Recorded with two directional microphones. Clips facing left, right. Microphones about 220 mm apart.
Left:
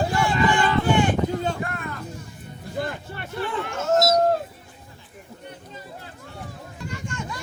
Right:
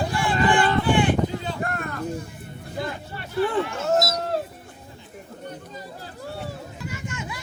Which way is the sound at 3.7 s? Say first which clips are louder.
Left 3 dB; 50° left (ahead or behind).